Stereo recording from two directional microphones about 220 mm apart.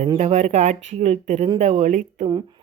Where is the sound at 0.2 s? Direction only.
30° right (ahead or behind).